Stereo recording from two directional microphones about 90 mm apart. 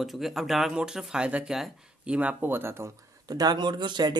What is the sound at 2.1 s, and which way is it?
Speech, 20° right (ahead or behind).